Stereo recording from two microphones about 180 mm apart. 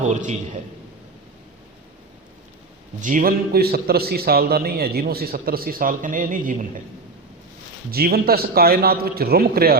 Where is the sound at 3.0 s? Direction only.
45° right (ahead or behind).